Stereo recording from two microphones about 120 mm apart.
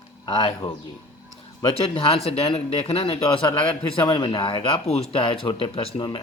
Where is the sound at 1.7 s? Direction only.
50° left (ahead or behind).